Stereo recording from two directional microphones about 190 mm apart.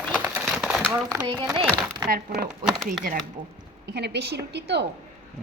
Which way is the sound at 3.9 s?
60° right (ahead or behind).